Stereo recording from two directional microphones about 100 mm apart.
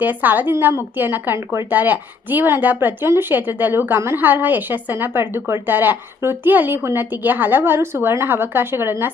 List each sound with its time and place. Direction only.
0.0 s a woman's voice: 15° right (ahead or behind)